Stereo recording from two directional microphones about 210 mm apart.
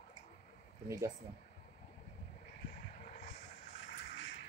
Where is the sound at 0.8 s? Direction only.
15° right (ahead or behind).